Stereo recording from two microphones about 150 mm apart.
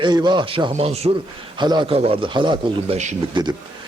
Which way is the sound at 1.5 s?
30° right (ahead or behind).